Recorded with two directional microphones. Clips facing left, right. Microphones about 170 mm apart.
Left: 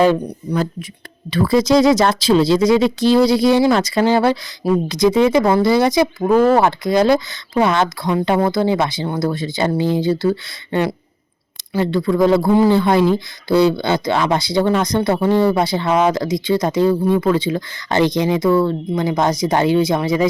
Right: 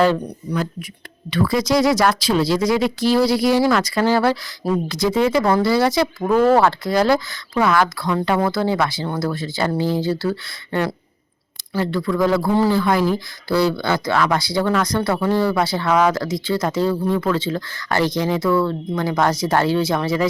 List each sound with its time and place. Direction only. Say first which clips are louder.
0.5 s speech: left 4 dB; 30° left (ahead or behind); by 20.2 s 15° left (ahead or behind)